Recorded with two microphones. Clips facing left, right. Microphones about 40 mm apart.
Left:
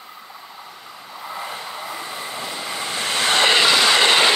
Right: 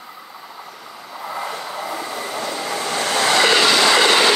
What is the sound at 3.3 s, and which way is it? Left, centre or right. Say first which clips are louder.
Train: right 1 dB; left.